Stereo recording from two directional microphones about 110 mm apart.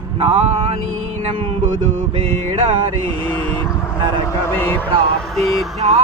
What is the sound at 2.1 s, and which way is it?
Music, 55° right (ahead or behind).